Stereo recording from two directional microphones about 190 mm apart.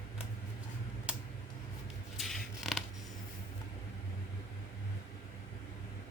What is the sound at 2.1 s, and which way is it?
Scissors, centre (ahead or behind).